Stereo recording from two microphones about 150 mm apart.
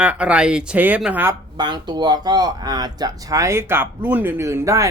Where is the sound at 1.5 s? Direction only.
30° right (ahead or behind).